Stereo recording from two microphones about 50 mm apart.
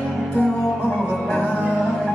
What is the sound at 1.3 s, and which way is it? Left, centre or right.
Music, left.